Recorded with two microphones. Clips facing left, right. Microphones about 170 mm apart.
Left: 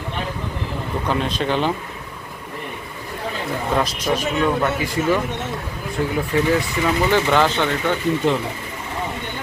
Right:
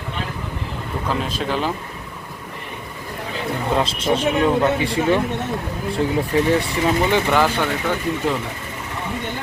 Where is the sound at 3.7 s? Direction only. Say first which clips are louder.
Right 1 dB; 25° right (ahead or behind).